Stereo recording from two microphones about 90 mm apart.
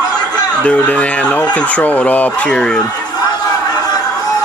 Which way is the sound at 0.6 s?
15° left (ahead or behind).